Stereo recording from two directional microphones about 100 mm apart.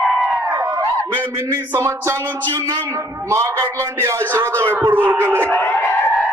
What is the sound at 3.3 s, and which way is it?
Speech, 35° right (ahead or behind).